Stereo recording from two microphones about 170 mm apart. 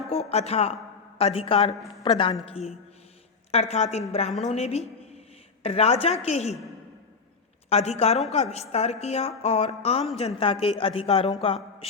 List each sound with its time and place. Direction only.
0.1 s a woman's voice: 35° left (ahead or behind)
7.7 s a woman's voice: 40° left (ahead or behind)